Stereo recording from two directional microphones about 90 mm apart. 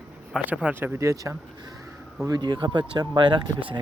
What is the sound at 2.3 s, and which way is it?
Speech, 55° right (ahead or behind).